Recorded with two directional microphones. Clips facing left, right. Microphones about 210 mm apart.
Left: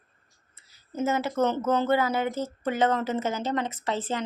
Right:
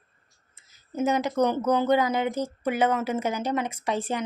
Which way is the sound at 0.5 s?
15° right (ahead or behind).